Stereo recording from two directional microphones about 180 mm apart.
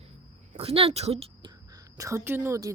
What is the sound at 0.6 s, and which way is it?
Speech, 30° right (ahead or behind).